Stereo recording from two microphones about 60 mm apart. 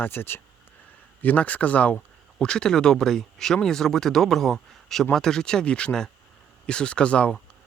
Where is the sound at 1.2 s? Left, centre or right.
Left.